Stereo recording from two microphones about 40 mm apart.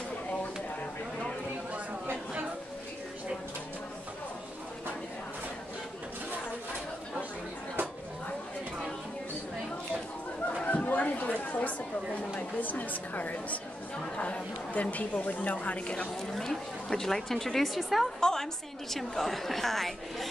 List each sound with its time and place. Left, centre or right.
10.7 s speech: left
14.0 s speech: left
16.2 s a woman's voice: centre
17.7 s a woman's voice: centre
18.2 s a woman's voice: centre